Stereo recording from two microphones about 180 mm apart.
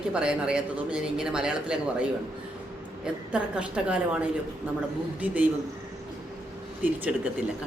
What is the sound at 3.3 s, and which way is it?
Speech, 5° right (ahead or behind).